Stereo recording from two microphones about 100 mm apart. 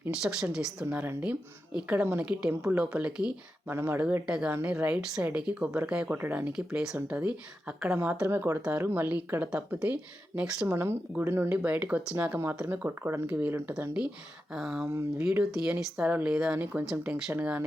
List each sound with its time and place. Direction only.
0.1 s speech: 5° right (ahead or behind)
0.9 s speech: 15° right (ahead or behind)
3.7 s speech: 25° right (ahead or behind)
4.3 s speech: 10° right (ahead or behind)
8.3 s speech: 25° right (ahead or behind)
10.7 s speech: 25° right (ahead or behind)